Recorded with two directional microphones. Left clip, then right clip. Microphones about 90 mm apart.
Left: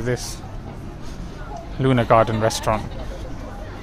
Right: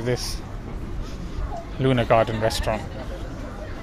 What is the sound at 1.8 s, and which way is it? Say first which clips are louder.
Speech: left 3 dB; 55° left (ahead or behind).